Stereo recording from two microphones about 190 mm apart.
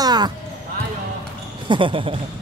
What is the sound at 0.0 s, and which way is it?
Basketball bounce, 20° right (ahead or behind).